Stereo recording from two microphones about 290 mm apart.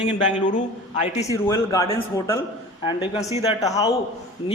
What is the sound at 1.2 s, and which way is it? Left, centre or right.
Speech, centre.